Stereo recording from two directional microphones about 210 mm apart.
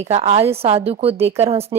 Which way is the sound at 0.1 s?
30° right (ahead or behind).